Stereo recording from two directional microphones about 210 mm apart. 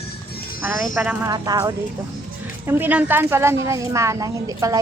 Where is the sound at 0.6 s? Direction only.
5° right (ahead or behind).